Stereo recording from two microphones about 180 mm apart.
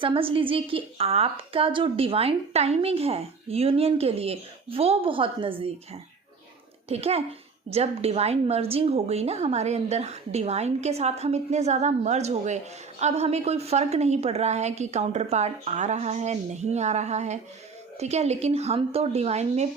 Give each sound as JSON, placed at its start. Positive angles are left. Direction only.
{"t": 0.0, "sound": "a woman's voice", "side_deg": -30}